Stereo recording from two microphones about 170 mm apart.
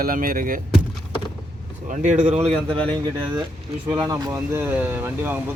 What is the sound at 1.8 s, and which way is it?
Speech, 45° right (ahead or behind).